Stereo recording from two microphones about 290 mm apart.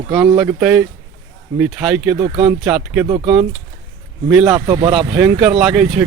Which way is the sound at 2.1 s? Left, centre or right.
Right.